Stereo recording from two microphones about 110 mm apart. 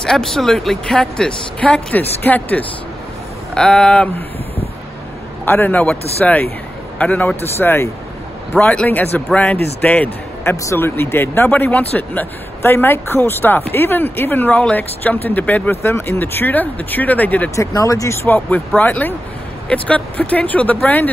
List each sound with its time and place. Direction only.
0.0 s speech: 5° left (ahead or behind)
5.4 s speech: 20° left (ahead or behind)
7.6 s speech: 25° left (ahead or behind)
8.5 s speech: 10° left (ahead or behind)
10.5 s speech: 25° left (ahead or behind)
17.6 s speech: 30° left (ahead or behind)